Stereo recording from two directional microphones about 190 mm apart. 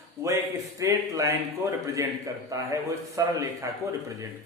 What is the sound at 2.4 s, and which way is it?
Speech, 15° right (ahead or behind).